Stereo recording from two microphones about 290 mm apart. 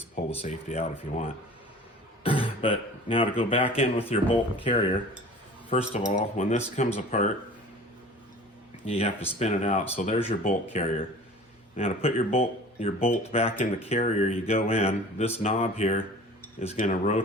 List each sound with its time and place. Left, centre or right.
0.4 s speech: left
8.9 s speech: left